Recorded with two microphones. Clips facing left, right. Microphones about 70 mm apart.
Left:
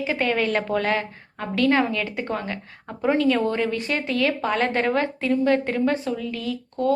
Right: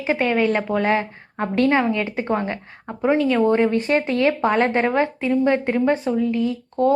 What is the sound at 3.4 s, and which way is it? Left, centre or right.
A woman's voice, right.